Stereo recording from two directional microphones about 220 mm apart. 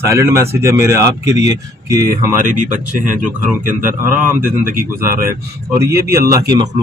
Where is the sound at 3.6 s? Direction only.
10° right (ahead or behind).